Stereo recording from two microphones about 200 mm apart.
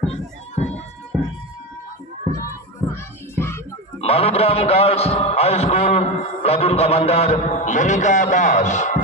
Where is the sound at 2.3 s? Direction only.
15° left (ahead or behind).